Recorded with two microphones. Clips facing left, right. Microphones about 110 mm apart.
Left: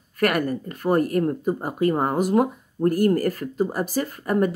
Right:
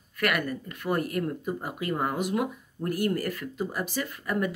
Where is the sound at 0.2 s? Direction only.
40° left (ahead or behind).